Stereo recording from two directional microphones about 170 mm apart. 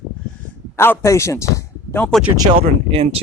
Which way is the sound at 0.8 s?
15° left (ahead or behind).